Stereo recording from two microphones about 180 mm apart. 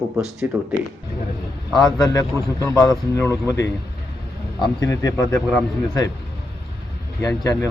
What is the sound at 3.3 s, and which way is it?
Speech, 15° right (ahead or behind).